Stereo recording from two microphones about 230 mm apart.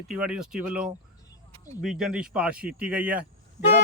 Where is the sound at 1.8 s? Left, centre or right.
Centre.